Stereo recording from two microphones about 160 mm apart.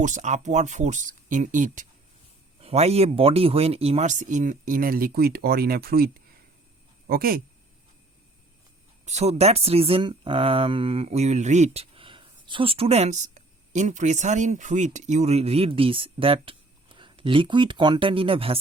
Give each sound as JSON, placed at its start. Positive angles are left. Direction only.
{"t": 0.0, "sound": "speech", "side_deg": -50}
{"t": 2.6, "sound": "speech", "side_deg": -40}
{"t": 9.0, "sound": "speech", "side_deg": -45}